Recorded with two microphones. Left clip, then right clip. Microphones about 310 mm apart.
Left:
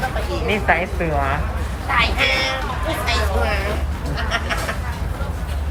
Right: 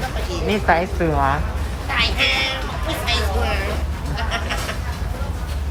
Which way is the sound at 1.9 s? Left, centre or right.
Centre.